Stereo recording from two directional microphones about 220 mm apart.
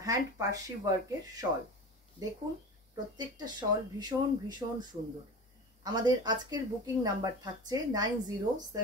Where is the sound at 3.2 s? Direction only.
20° right (ahead or behind).